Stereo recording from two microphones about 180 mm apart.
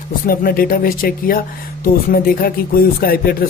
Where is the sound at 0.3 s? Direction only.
55° left (ahead or behind).